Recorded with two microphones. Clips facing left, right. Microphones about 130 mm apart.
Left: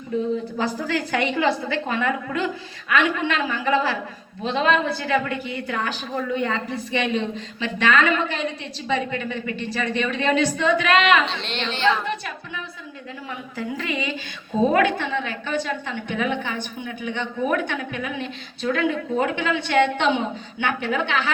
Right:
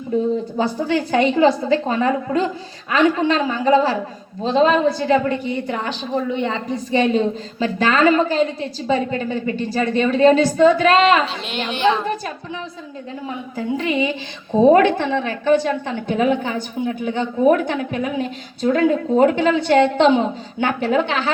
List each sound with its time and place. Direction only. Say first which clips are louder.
1.1 s a woman's voice: right 7 dB; 30° right (ahead or behind)
11.3 s a woman's voice: right 3 dB; 10° right (ahead or behind)
12.0 s a woman's voice: right 4 dB; 35° right (ahead or behind)